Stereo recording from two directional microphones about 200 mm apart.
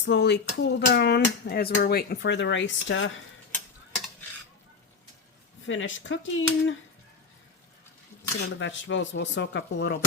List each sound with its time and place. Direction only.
0.0 s speech: 60° left (ahead or behind)
5.6 s speech: 70° left (ahead or behind)
8.5 s speech: 65° left (ahead or behind)